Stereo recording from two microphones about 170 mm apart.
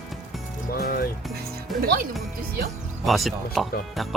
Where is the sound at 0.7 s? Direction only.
65° left (ahead or behind).